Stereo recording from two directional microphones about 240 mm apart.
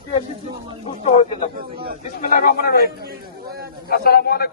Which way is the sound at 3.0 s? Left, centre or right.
Right.